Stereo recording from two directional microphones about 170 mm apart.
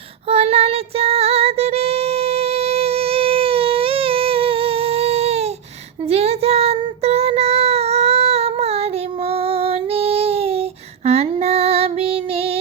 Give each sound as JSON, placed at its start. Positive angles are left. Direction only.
{"t": 0.3, "sound": "music", "side_deg": -35}
{"t": 6.1, "sound": "child singing", "side_deg": -35}